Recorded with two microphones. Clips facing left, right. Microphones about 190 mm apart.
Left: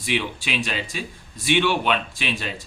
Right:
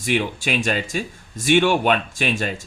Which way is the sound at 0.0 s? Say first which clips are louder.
Right 4 dB; 45° right (ahead or behind).